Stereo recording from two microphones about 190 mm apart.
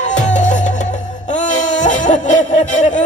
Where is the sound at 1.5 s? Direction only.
40° left (ahead or behind).